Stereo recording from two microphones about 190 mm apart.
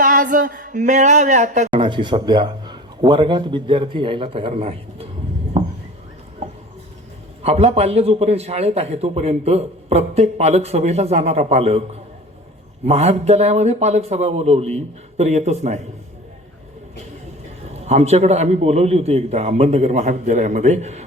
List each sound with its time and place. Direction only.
0.0 s speech: 45° right (ahead or behind)
1.8 s a man's voice: 25° right (ahead or behind)
5.5 s a sound: 30° right (ahead or behind)
7.4 s a man's voice: 30° right (ahead or behind)
12.8 s a man's voice: 35° right (ahead or behind)
17.8 s a man's voice: 35° right (ahead or behind)